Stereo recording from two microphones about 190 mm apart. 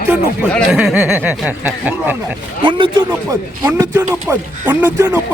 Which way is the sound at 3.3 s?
15° right (ahead or behind).